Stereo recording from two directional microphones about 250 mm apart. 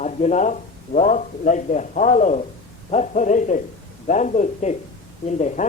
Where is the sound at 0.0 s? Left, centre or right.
Left.